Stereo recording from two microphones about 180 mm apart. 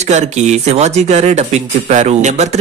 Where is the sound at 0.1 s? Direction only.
40° right (ahead or behind).